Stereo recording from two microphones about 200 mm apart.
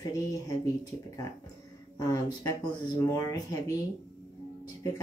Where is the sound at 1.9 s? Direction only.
15° left (ahead or behind).